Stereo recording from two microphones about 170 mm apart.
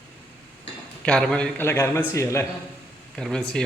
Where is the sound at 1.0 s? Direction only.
5° left (ahead or behind).